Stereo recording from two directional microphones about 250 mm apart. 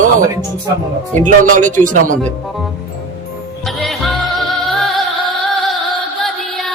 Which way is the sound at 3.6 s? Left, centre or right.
Centre.